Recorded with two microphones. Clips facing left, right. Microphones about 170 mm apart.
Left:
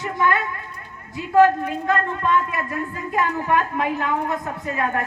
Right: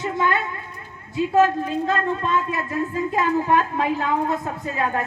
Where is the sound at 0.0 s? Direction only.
25° right (ahead or behind).